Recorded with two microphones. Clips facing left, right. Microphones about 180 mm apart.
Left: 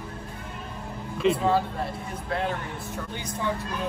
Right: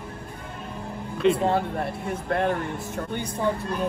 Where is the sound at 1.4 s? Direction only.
55° right (ahead or behind).